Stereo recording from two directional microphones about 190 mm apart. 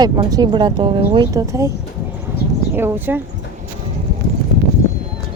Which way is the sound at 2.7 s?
10° right (ahead or behind).